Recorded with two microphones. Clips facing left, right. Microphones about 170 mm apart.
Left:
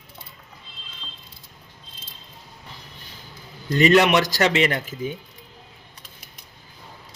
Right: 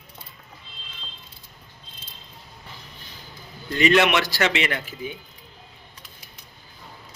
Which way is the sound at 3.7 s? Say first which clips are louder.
Left 3 dB; 40° left (ahead or behind).